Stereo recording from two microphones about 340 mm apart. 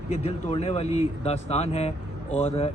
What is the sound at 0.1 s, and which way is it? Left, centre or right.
Speech, centre.